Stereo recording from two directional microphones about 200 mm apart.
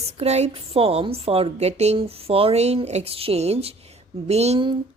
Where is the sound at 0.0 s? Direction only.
30° right (ahead or behind).